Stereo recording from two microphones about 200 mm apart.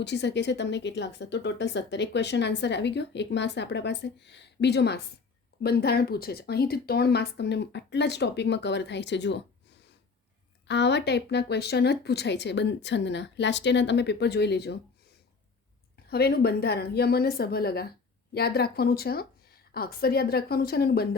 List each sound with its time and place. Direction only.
0.0 s a woman's voice: 60° left (ahead or behind)
16.0 s a woman's voice: 50° left (ahead or behind)